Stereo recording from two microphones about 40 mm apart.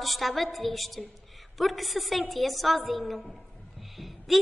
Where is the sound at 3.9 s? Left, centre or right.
Centre.